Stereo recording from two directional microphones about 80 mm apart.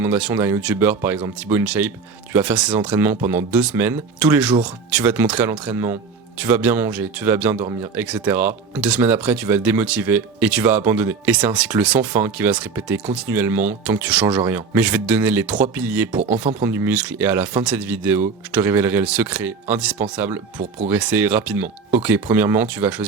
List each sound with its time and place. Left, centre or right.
0.0 s speech: centre
5.7 s a man's voice: right
6.3 s speech: centre
16.6 s speech: right
16.9 s speech: centre